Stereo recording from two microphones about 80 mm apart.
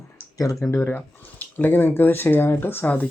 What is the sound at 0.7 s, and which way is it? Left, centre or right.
Speech, left.